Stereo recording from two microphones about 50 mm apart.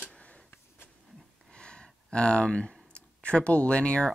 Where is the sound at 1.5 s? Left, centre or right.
Centre.